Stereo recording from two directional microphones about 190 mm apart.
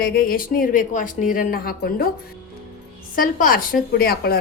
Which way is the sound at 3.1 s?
45° left (ahead or behind).